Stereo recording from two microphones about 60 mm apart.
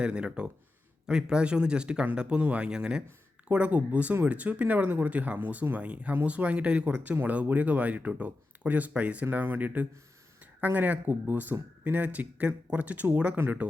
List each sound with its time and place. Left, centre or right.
0.0 s speech: centre
9.2 s speech: right